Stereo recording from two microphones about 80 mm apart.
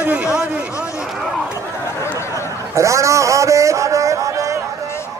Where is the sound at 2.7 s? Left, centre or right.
Right.